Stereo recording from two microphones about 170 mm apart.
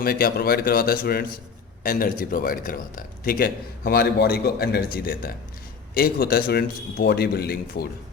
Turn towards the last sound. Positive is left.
turn(degrees=65)  # may be behind; listen again after turning